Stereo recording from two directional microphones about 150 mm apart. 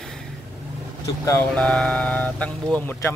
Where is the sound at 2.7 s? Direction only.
10° left (ahead or behind).